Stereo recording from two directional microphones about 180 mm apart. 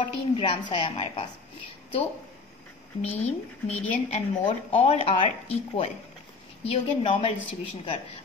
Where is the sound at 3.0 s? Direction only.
35° left (ahead or behind).